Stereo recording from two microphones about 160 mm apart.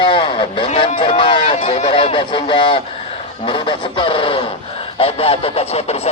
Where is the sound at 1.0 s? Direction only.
30° left (ahead or behind).